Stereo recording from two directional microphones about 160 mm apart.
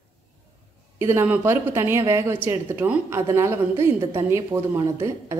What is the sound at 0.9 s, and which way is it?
A woman's voice, 15° right (ahead or behind).